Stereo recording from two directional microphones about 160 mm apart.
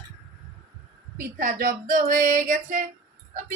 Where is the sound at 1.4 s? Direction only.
60° right (ahead or behind).